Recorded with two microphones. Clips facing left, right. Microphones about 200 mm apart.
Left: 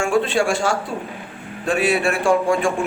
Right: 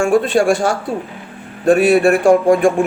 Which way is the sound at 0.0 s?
50° right (ahead or behind).